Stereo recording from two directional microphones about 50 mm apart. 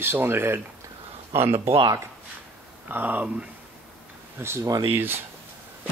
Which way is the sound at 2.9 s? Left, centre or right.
Right.